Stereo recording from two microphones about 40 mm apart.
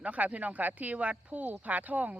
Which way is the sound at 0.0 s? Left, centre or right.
Right.